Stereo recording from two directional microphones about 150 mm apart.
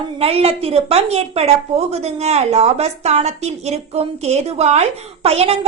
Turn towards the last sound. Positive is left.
turn(degrees=-45)  # may be behind; listen again after turning